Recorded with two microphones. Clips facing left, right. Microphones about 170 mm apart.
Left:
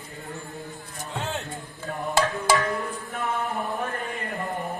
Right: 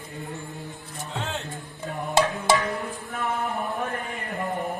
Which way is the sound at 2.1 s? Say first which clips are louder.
Right 1 dB; 20° right (ahead or behind).